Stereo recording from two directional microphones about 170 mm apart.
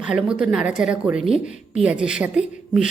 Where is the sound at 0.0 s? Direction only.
5° right (ahead or behind).